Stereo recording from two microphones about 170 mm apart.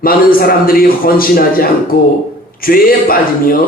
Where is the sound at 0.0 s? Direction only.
60° left (ahead or behind).